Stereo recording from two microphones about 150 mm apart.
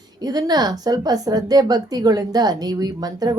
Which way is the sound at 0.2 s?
25° right (ahead or behind).